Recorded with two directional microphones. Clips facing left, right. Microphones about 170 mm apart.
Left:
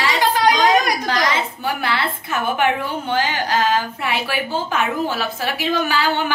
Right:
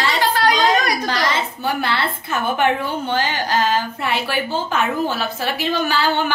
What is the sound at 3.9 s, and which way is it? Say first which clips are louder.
A woman's voice: right 1 dB; 10° left (ahead or behind).